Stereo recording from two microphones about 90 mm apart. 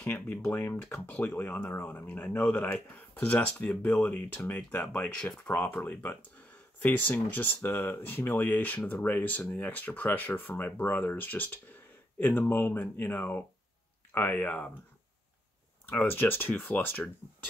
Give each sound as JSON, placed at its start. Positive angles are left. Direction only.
{"t": 0.0, "sound": "speech", "side_deg": 15}
{"t": 5.7, "sound": "speech", "side_deg": 20}
{"t": 15.8, "sound": "speech", "side_deg": 20}